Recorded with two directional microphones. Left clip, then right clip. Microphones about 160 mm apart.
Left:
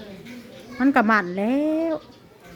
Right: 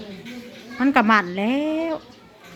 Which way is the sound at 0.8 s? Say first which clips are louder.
Right 1 dB; 35° left (ahead or behind).